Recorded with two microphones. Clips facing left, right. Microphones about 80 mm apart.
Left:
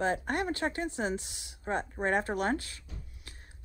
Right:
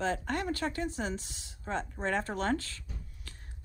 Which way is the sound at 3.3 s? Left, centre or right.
Centre.